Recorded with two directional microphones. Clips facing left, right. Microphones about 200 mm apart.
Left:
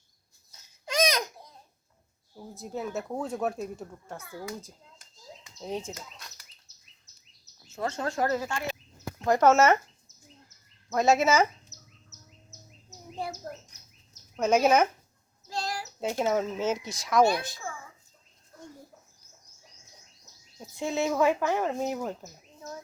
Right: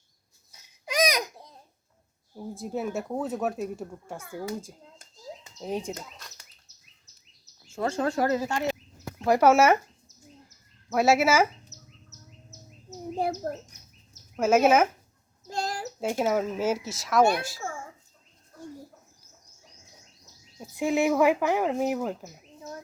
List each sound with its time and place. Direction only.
0.5 s a sound: 15° right (ahead or behind)
2.3 s speech: 15° right (ahead or behind)
5.5 s speech: 15° right (ahead or behind)
7.7 s speech: 30° right (ahead or behind)
8.2 s speech: 15° right (ahead or behind)
10.9 s speech: 10° right (ahead or behind)
12.9 s bird: 50° right (ahead or behind)
14.1 s a sound: 5° right (ahead or behind)
15.5 s a sound: 50° right (ahead or behind)
16.0 s speech: 5° right (ahead or behind)
20.7 s speech: 15° right (ahead or behind)